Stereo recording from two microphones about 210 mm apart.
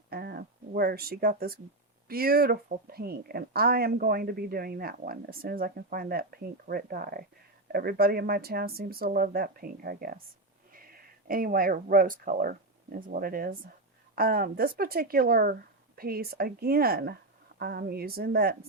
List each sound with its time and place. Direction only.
0.1 s a woman's voice: 45° right (ahead or behind)